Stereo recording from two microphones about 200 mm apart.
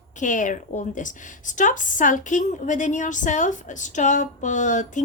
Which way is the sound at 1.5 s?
40° left (ahead or behind).